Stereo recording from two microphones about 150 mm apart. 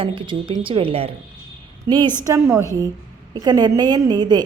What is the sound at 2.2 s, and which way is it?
A woman's voice, 20° right (ahead or behind).